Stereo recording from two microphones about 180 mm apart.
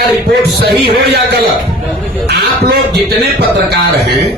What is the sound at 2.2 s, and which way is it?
Speech, 65° right (ahead or behind).